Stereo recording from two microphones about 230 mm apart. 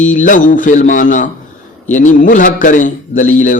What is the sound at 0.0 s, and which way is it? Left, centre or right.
Speech, left.